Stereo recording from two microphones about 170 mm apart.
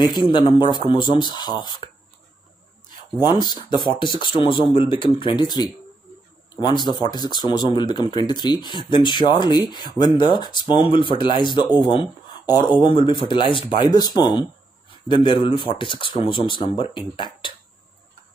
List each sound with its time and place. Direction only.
0.0 s speech: 25° left (ahead or behind)
2.9 s speech: 25° left (ahead or behind)